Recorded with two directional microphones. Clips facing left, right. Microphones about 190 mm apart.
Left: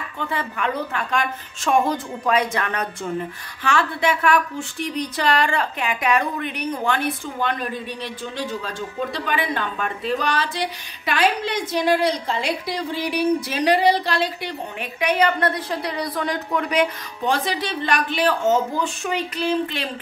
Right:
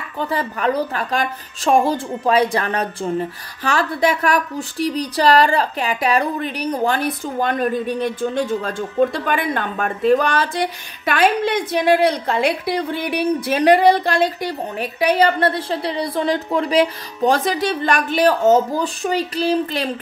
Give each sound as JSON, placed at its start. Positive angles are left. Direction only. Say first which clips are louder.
{"t": 0.2, "sound": "a woman's voice", "louder": "right 5 dB", "side_deg": -35}